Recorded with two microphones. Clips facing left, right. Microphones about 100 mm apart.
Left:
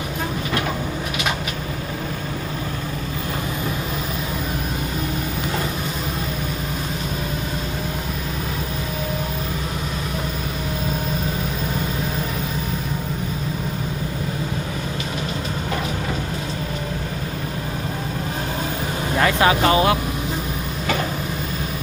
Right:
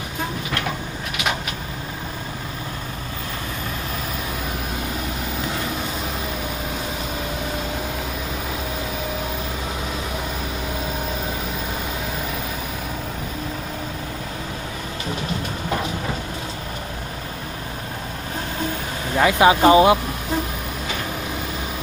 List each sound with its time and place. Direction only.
19.2 s speech: 20° right (ahead or behind)